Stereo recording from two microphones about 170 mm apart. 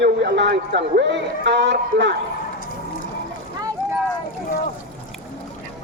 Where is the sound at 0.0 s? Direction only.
90° right.